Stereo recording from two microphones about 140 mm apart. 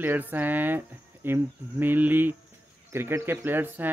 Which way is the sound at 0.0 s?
15° right (ahead or behind).